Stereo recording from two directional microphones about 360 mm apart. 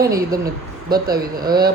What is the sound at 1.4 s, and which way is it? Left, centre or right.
Speech, centre.